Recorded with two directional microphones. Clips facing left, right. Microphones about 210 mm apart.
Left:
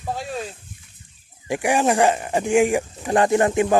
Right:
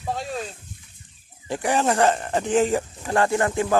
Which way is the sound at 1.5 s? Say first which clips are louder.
Left 3 dB; 10° left (ahead or behind).